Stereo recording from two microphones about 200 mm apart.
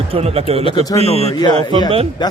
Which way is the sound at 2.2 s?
20° left (ahead or behind).